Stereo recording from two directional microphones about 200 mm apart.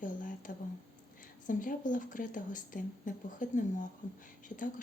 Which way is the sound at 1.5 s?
40° left (ahead or behind).